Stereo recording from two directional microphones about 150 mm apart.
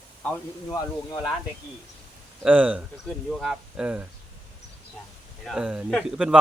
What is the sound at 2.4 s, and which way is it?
Speech, 10° right (ahead or behind).